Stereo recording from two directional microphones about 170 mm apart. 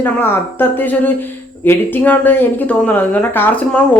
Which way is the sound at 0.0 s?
10° left (ahead or behind).